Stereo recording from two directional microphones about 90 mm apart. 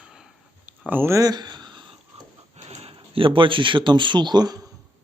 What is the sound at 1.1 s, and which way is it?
Speech, 45° right (ahead or behind).